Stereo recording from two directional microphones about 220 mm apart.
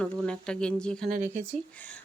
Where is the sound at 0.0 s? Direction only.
5° left (ahead or behind).